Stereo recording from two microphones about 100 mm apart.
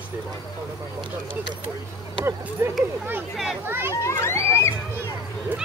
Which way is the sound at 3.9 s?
30° left (ahead or behind).